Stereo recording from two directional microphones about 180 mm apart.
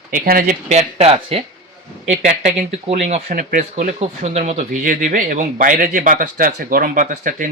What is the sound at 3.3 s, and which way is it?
Speech, 55° right (ahead or behind).